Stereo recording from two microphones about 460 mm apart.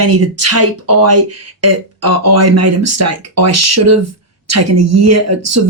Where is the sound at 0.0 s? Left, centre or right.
Right.